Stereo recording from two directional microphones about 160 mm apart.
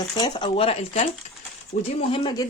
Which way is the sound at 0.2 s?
30° left (ahead or behind).